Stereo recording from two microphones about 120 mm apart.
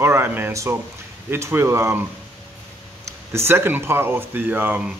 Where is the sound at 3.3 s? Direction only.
20° right (ahead or behind).